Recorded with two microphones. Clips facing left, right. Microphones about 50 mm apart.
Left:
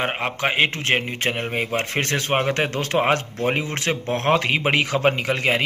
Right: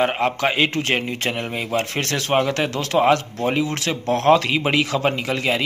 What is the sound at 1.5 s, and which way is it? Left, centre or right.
A man's voice, left.